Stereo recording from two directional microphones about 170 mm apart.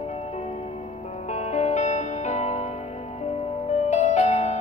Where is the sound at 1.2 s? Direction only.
40° left (ahead or behind).